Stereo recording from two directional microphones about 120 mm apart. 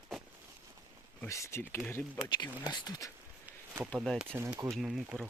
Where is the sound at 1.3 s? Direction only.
25° left (ahead or behind).